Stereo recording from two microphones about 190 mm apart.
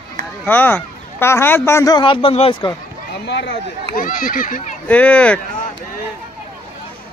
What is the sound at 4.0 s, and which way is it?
Speech, 45° left (ahead or behind).